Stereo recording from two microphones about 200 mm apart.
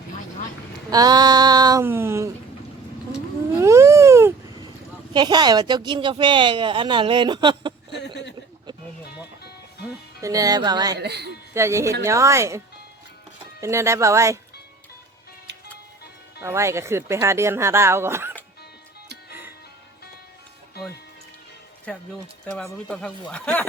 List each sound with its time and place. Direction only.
0.9 s a sound: 20° right (ahead or behind)
3.6 s babbling: 15° right (ahead or behind)
5.1 s a woman's voice: 20° right (ahead or behind)
10.2 s a woman's voice: 15° right (ahead or behind)
10.9 s speech: 55° right (ahead or behind)
11.5 s speech: 15° right (ahead or behind)
16.4 s speech: 15° right (ahead or behind)
21.9 s speech: 5° left (ahead or behind)